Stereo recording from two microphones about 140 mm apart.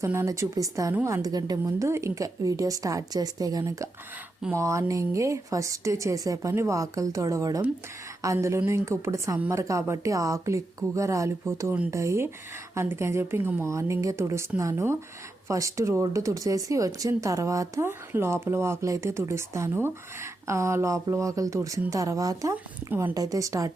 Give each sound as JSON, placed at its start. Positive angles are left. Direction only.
{"t": 0.0, "sound": "speech", "side_deg": -20}
{"t": 22.9, "sound": "speech", "side_deg": -15}
{"t": 23.1, "sound": "speech", "side_deg": -25}